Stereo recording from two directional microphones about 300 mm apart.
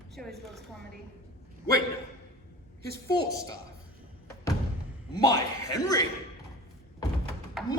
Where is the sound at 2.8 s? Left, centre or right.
Right.